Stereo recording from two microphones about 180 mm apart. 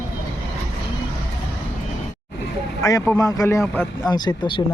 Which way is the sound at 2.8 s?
15° left (ahead or behind).